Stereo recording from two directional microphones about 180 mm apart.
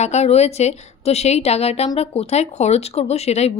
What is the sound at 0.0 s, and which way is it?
Speech, 35° left (ahead or behind).